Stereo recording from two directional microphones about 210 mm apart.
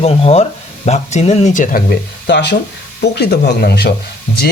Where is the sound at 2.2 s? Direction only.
55° left (ahead or behind).